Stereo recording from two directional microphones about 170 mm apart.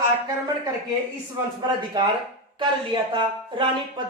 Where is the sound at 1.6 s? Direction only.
25° right (ahead or behind).